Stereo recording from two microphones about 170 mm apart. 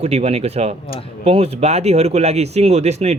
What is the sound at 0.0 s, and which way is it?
Speech, 35° right (ahead or behind).